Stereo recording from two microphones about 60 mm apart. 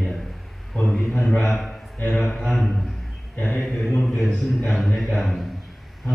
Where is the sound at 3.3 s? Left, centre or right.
Left.